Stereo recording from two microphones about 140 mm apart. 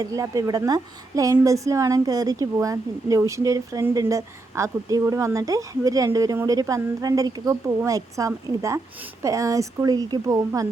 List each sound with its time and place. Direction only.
0.0 s a woman's voice: 25° right (ahead or behind)